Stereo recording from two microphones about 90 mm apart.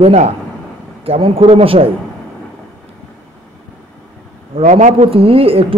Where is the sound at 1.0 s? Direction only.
90° right.